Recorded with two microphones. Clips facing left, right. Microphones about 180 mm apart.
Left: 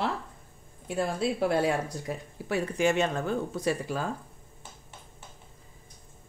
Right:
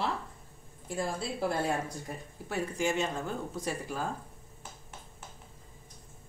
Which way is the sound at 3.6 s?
75° left (ahead or behind).